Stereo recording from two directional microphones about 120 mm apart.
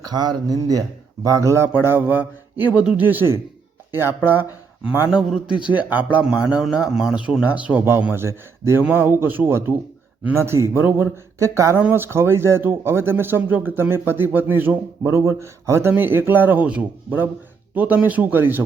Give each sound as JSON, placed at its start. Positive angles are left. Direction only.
{"t": 0.0, "sound": "speech", "side_deg": -35}